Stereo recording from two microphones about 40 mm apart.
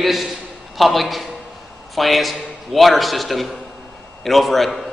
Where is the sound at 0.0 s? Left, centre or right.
Centre.